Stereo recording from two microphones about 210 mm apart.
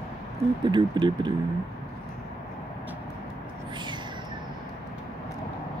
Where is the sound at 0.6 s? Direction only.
20° right (ahead or behind).